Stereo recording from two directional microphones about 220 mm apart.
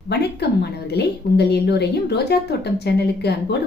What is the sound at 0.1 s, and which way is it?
A woman's voice, 50° left (ahead or behind).